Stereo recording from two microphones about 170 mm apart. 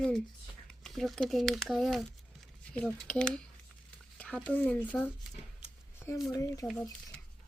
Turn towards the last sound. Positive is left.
turn(degrees=20)  # may be behind; listen again after turning